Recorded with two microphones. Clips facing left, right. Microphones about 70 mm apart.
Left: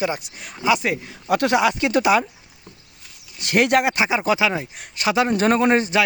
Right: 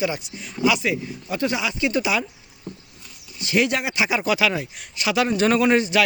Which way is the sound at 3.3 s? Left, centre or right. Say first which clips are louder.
Left 4 dB; left.